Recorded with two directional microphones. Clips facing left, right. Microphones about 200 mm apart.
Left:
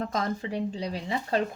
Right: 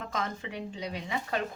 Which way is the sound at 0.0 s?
35° left (ahead or behind).